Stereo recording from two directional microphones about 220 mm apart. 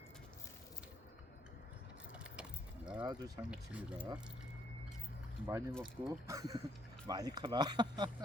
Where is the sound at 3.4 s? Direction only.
5° right (ahead or behind).